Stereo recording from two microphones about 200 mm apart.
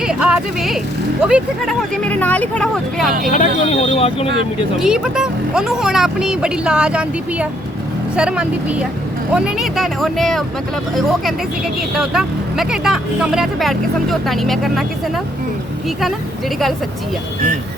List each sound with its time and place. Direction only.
0.0 s a sound: 5° right (ahead or behind)
1.2 s speech: 5° right (ahead or behind)
2.0 s speech: 5° left (ahead or behind)
3.3 s speech: 30° left (ahead or behind)
4.8 s speech: 5° right (ahead or behind)
11.9 s speech: centre (ahead or behind)